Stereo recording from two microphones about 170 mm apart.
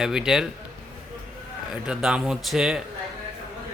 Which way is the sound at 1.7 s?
5° right (ahead or behind).